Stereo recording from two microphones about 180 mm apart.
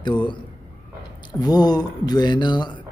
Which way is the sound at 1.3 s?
20° left (ahead or behind).